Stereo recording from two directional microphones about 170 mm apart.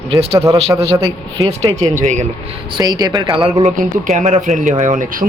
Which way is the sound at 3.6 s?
45° right (ahead or behind).